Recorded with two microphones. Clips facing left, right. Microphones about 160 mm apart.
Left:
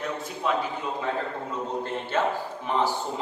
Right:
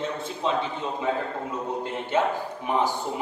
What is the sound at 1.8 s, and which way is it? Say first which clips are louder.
Speech: right 2 dB; 15° right (ahead or behind).